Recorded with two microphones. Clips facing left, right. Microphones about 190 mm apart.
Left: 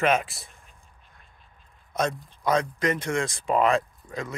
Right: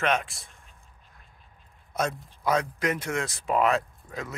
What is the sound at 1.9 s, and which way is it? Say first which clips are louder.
Speech: left 2 dB; 5° right (ahead or behind).